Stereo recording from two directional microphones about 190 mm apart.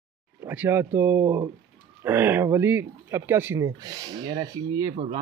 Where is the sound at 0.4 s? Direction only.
10° right (ahead or behind).